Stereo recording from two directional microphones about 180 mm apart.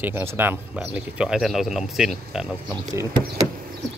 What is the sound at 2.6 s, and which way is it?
Speech, 20° right (ahead or behind).